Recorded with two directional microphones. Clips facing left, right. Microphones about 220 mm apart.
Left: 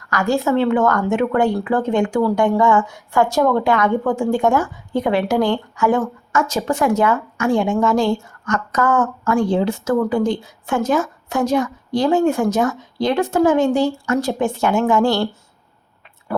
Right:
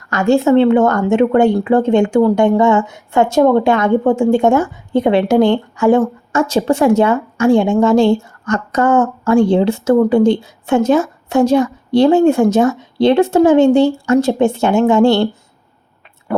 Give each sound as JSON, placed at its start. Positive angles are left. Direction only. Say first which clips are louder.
{"t": 0.1, "sound": "speech", "louder": "right 7 dB", "side_deg": -25}